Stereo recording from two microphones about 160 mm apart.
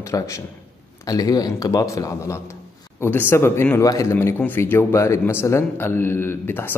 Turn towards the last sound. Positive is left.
turn(degrees=15)  # may be behind; listen again after turning